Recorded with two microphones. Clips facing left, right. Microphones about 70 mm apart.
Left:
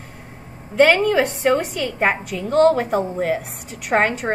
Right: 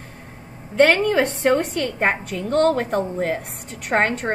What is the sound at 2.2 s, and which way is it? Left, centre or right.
Speech, right.